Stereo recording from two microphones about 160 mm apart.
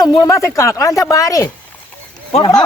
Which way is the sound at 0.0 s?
25° left (ahead or behind).